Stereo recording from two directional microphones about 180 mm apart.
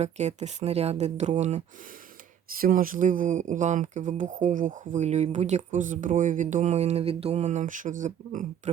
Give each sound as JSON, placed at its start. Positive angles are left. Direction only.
{"t": 0.0, "sound": "speech", "side_deg": -40}
{"t": 2.5, "sound": "speech", "side_deg": -50}